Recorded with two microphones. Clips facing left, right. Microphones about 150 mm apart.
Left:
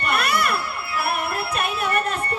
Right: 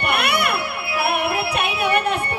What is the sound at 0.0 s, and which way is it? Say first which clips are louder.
Music: right 1 dB; 65° right (ahead or behind).